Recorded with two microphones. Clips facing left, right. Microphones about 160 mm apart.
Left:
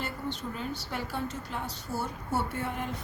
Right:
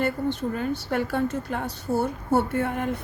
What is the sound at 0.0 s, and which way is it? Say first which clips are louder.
A woman's voice: right 10 dB; 55° right (ahead or behind).